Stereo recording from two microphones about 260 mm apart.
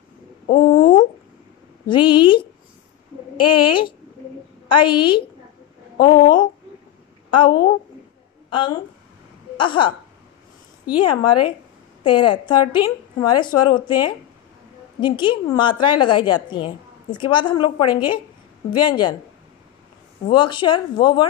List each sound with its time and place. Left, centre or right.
0.5 s a sound: left
1.9 s a woman's voice: centre
11.0 s a woman's voice: centre
20.2 s a woman's voice: centre